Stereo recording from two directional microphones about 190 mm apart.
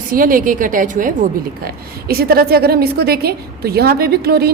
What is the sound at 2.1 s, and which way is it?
A woman's voice, 55° right (ahead or behind).